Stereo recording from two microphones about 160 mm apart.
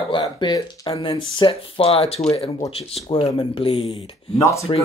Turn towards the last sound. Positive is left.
turn(degrees=20)  # may be behind; listen again after turning